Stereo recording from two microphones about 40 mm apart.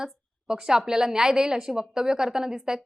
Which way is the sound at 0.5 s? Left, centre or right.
Centre.